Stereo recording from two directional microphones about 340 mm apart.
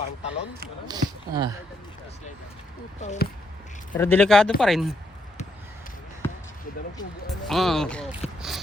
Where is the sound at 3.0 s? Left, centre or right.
Left.